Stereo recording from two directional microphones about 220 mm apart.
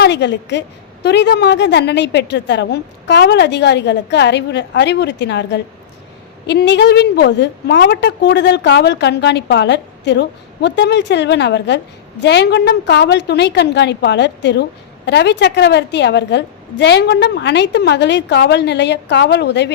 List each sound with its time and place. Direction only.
0.0 s a woman's voice: 50° left (ahead or behind)